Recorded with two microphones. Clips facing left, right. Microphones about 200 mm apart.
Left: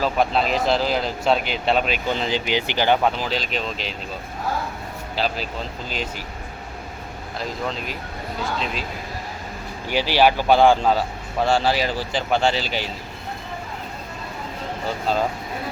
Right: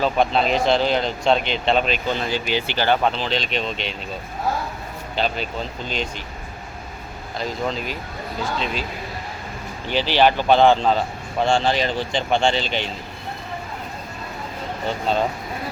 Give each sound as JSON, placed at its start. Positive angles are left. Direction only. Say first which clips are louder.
{"t": 0.0, "sound": "speech", "louder": "right 1 dB", "side_deg": 0}
{"t": 5.1, "sound": "speech", "louder": "right 1 dB", "side_deg": 5}
{"t": 7.3, "sound": "speech", "louder": "right 3 dB", "side_deg": 0}
{"t": 9.9, "sound": "a man's voice", "louder": "even", "side_deg": 10}
{"t": 14.8, "sound": "speech", "louder": "right 1 dB", "side_deg": 5}